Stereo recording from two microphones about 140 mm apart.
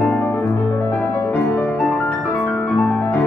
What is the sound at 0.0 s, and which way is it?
Music, 10° left (ahead or behind).